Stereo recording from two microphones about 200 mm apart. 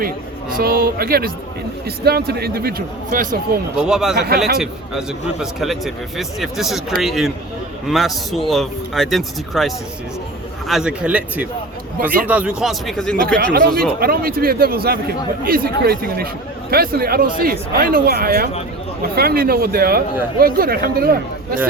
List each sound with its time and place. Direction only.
0.5 s a man's voice: 50° right (ahead or behind)
3.8 s speech: 5° right (ahead or behind)
13.2 s a man's voice: 50° right (ahead or behind)